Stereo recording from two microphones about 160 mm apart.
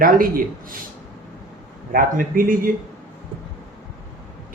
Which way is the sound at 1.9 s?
60° right (ahead or behind).